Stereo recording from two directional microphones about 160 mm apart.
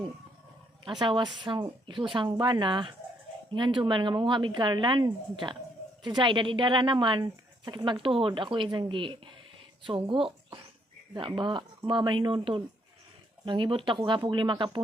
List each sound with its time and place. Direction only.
0.9 s speech: 30° right (ahead or behind)